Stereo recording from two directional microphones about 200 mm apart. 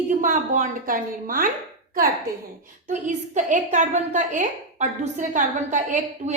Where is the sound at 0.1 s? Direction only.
40° right (ahead or behind).